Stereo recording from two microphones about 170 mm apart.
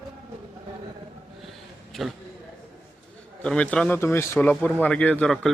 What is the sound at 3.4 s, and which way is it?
A man's voice, 5° left (ahead or behind).